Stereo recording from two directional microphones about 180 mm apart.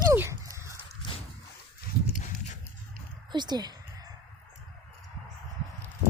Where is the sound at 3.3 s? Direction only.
25° right (ahead or behind).